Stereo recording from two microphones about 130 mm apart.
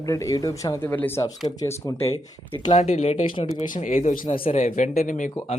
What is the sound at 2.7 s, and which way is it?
Speech, 60° left (ahead or behind).